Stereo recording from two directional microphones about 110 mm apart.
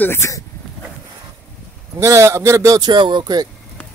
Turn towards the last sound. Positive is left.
turn(degrees=-40)  # may be behind; listen again after turning